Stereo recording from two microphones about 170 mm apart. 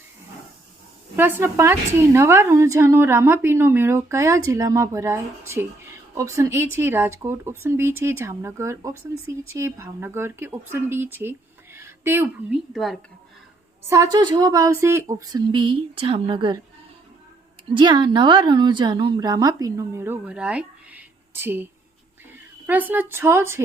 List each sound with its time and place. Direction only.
1.1 s a woman's voice: 10° right (ahead or behind)
12.7 s speech: centre (ahead or behind)
13.8 s a woman's voice: 20° right (ahead or behind)
17.7 s a woman's voice: 25° right (ahead or behind)